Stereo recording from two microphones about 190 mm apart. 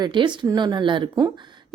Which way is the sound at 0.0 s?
25° right (ahead or behind).